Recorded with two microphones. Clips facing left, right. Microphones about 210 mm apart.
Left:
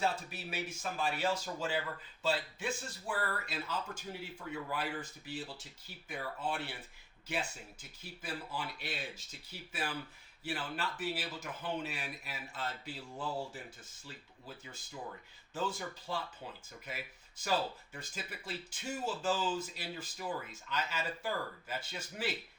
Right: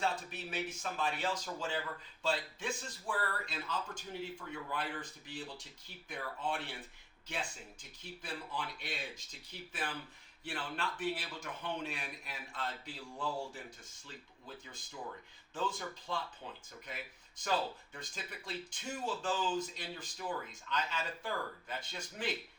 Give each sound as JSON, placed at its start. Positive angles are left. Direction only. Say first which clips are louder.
{"t": 0.0, "sound": "a man's voice", "louder": "left 1 dB", "side_deg": 10}